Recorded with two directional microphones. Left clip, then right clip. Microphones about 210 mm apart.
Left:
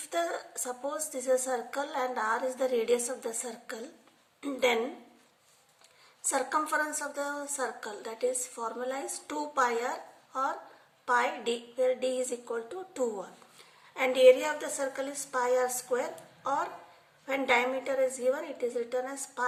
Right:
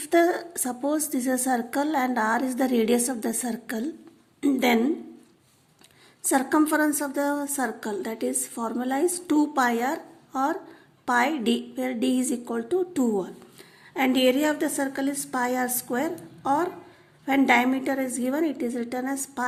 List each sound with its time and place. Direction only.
0.1 s a woman's voice: 40° right (ahead or behind)
6.2 s a woman's voice: 40° right (ahead or behind)